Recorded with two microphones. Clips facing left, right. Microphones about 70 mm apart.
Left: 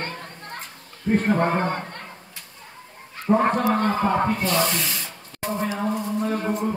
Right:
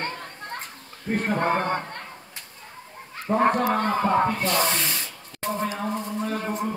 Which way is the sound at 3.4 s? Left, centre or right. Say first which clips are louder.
Left 1 dB; centre.